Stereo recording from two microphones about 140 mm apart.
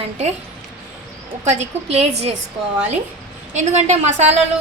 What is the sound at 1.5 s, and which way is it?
Speech, 50° right (ahead or behind).